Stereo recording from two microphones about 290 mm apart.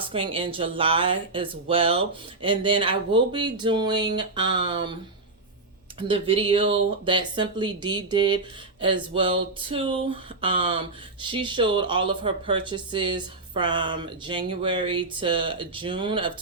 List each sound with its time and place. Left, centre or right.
0.1 s speech: centre
6.0 s speech: centre